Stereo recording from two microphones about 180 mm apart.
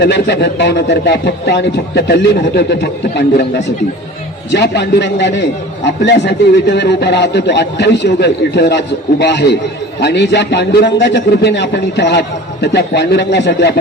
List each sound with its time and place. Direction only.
0.0 s a man's voice: 65° left (ahead or behind)
4.5 s a man's voice: 70° left (ahead or behind)